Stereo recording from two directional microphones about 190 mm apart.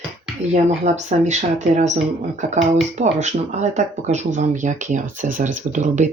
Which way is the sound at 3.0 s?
40° right (ahead or behind).